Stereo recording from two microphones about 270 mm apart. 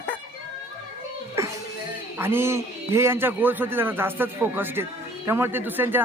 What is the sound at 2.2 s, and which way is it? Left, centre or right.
A man's voice, centre.